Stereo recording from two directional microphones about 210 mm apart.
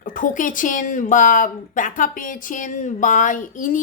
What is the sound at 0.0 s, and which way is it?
A woman's voice, 40° left (ahead or behind).